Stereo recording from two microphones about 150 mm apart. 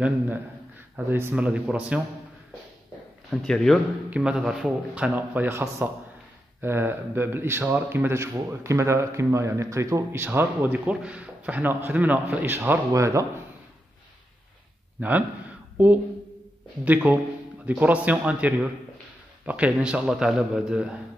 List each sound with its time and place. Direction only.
0.9 s a man's voice: 10° right (ahead or behind)
3.3 s a man's voice: centre (ahead or behind); by 13.3 s 20° right (ahead or behind)
15.0 s speech: 10° right (ahead or behind)
16.8 s a man's voice: 10° right (ahead or behind)